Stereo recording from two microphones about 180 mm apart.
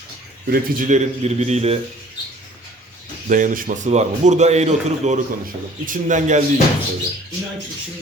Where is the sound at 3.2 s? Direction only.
45° right (ahead or behind).